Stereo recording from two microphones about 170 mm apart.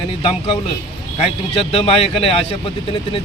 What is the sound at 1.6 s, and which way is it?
Speech, 35° left (ahead or behind).